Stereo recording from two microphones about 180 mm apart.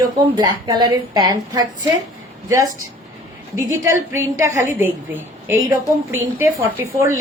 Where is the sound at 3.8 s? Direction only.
15° right (ahead or behind).